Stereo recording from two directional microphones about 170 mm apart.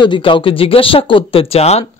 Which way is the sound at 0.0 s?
30° left (ahead or behind).